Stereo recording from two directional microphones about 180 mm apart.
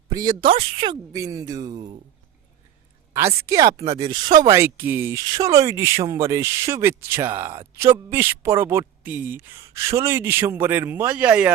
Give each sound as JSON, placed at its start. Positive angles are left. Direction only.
{"t": 0.1, "sound": "speech", "side_deg": -25}
{"t": 3.1, "sound": "speech", "side_deg": -15}